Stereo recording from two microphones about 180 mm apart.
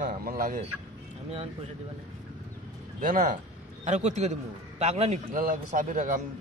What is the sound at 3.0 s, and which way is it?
A man's voice, 45° right (ahead or behind).